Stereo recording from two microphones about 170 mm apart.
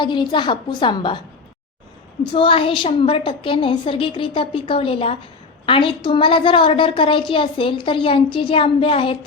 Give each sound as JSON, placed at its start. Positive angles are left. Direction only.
{"t": 0.0, "sound": "a woman's voice", "side_deg": 25}
{"t": 2.3, "sound": "a woman's voice", "side_deg": 30}